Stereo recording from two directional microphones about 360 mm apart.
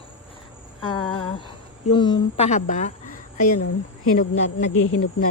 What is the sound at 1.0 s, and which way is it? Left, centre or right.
Speech, centre.